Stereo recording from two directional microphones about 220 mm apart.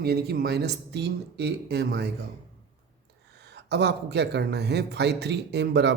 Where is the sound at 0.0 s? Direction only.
45° right (ahead or behind).